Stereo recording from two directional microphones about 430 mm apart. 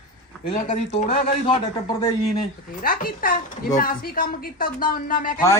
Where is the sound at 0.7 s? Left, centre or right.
Centre.